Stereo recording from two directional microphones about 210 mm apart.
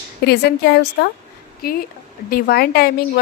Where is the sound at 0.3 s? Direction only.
50° left (ahead or behind).